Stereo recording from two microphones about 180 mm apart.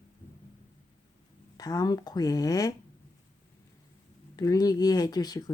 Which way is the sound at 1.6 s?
20° left (ahead or behind).